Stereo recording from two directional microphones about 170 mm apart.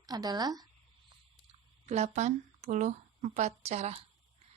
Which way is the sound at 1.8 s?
40° right (ahead or behind).